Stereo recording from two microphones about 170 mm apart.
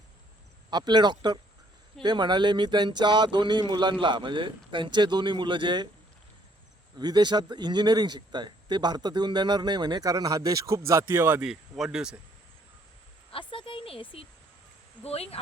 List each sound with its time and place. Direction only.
0.7 s speech: 25° right (ahead or behind)
7.0 s speech: 25° right (ahead or behind); by 12.1 s 5° right (ahead or behind)
13.5 s a sound: 30° left (ahead or behind)
15.0 s speech: 35° left (ahead or behind)